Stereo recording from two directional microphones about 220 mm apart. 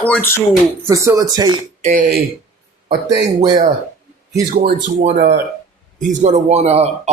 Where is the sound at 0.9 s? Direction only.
15° right (ahead or behind).